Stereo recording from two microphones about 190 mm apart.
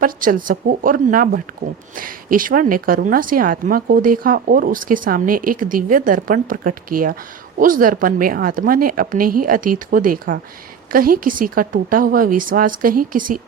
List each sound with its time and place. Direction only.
0.0 s a woman's voice: 45° right (ahead or behind)